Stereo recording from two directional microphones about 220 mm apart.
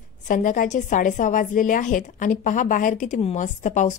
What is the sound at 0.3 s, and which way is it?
A woman's voice, 35° left (ahead or behind).